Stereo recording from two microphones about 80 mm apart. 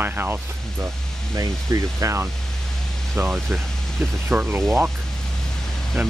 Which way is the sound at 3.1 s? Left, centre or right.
Right.